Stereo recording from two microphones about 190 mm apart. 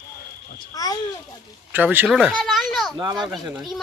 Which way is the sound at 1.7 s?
10° right (ahead or behind).